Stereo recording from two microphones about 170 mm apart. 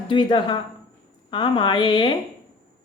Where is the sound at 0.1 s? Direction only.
25° left (ahead or behind).